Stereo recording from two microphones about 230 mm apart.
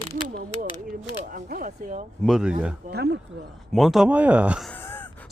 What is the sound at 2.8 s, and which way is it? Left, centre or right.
Speech, right.